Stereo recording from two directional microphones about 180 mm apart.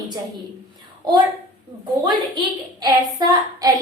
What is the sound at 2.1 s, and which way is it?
A woman's voice, 25° right (ahead or behind).